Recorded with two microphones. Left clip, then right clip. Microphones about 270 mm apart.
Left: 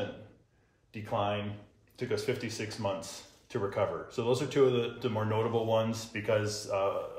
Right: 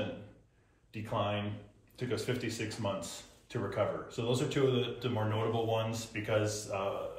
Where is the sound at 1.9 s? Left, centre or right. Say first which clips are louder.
Left 3 dB; centre.